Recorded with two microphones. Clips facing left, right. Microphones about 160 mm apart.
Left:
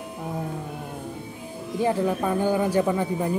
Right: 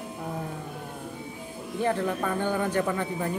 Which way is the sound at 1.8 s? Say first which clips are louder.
Left 3 dB; 10° left (ahead or behind).